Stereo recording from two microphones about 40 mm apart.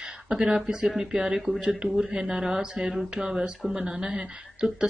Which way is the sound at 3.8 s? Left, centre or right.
Right.